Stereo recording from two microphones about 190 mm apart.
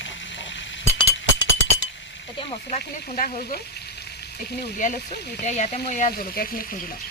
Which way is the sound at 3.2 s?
45° left (ahead or behind).